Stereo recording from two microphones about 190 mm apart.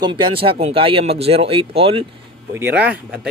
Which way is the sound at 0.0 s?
25° right (ahead or behind).